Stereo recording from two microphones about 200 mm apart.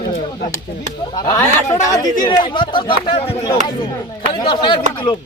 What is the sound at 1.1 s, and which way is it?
Speech, 15° left (ahead or behind).